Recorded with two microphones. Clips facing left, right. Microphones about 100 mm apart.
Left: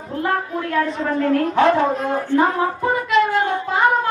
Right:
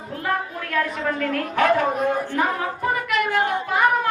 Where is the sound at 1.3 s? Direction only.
25° left (ahead or behind).